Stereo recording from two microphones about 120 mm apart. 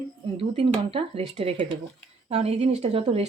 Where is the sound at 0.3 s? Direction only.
50° right (ahead or behind).